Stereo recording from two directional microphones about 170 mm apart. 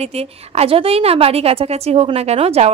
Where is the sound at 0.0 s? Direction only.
35° right (ahead or behind).